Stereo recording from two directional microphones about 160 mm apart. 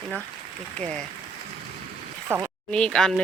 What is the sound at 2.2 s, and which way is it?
Speech, 15° right (ahead or behind).